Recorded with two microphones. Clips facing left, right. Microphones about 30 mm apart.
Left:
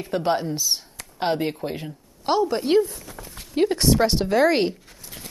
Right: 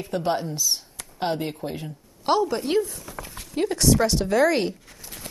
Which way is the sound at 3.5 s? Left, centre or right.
Left.